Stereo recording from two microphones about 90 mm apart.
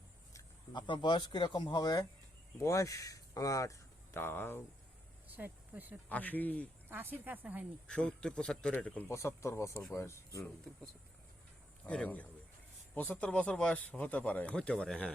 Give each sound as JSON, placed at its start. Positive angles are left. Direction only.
{"t": 0.7, "sound": "speech", "side_deg": 60}
{"t": 5.3, "sound": "speech", "side_deg": -20}
{"t": 6.1, "sound": "speech", "side_deg": 15}
{"t": 6.8, "sound": "speech", "side_deg": -25}
{"t": 7.9, "sound": "speech", "side_deg": 10}
{"t": 9.0, "sound": "speech", "side_deg": 30}
{"t": 10.7, "sound": "speech", "side_deg": 5}
{"t": 11.9, "sound": "speech", "side_deg": 15}